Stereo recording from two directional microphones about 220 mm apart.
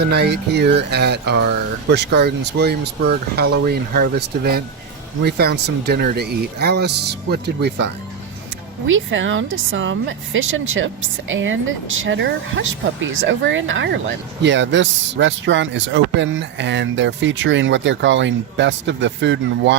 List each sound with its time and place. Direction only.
0.0 s speech: 50° right (ahead or behind)
8.9 s speech: 60° right (ahead or behind)